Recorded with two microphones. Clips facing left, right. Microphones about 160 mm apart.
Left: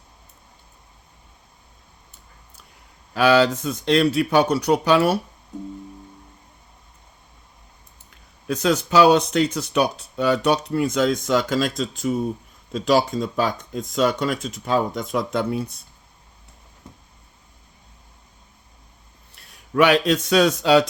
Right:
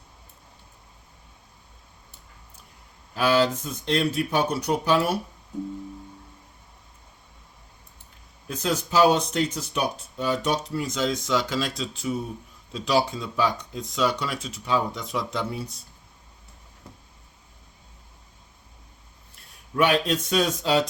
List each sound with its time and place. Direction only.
3.2 s speech: 75° left (ahead or behind)
8.4 s speech: 75° left (ahead or behind); by 15.8 s 55° left (ahead or behind)
19.7 s a man's voice: 80° left